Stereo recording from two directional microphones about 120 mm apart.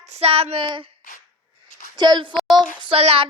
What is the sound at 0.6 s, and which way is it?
Speech, 40° right (ahead or behind).